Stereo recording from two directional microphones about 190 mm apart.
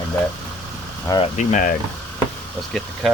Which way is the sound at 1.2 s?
40° left (ahead or behind).